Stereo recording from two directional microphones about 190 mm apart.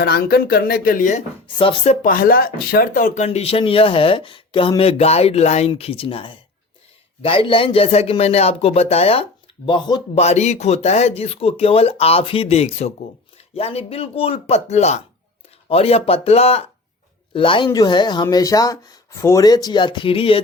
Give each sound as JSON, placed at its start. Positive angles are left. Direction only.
{"t": 0.0, "sound": "speech", "side_deg": 55}
{"t": 1.5, "sound": "speech", "side_deg": 25}
{"t": 10.2, "sound": "speech", "side_deg": 35}